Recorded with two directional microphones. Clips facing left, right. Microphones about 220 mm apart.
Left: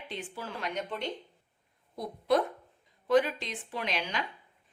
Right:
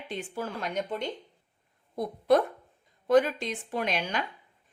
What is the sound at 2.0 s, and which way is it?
A woman's voice, 50° right (ahead or behind).